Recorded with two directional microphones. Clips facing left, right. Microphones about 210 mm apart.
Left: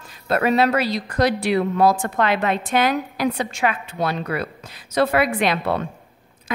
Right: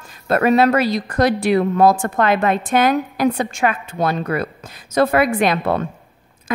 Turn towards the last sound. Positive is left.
turn(degrees=-50)  # may be behind; listen again after turning